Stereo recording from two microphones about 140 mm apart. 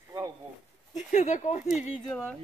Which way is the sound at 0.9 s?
60° left (ahead or behind).